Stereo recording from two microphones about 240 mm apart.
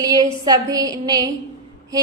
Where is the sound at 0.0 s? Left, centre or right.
Centre.